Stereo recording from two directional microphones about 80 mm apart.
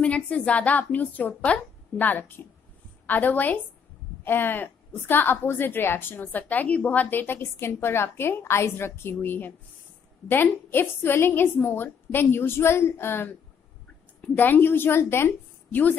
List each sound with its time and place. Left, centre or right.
0.0 s a woman's voice: centre